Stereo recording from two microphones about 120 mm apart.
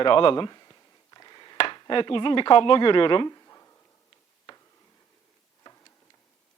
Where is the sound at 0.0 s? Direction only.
45° left (ahead or behind).